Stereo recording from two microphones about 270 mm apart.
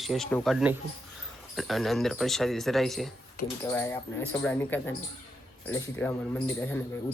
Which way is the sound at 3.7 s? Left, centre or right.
Centre.